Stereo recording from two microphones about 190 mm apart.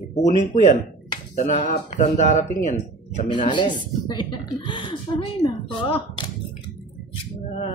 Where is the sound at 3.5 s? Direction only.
25° left (ahead or behind).